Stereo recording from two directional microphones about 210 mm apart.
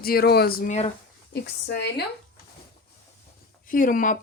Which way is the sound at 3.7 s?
40° left (ahead or behind).